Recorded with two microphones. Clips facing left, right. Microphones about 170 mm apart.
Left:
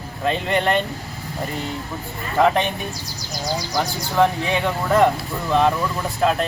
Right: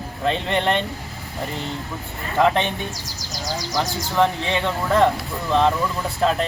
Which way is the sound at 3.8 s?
15° left (ahead or behind).